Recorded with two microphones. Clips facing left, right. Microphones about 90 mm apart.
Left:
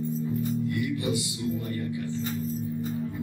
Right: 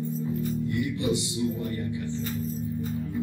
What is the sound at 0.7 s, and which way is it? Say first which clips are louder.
Music: right 1 dB; 25° right (ahead or behind).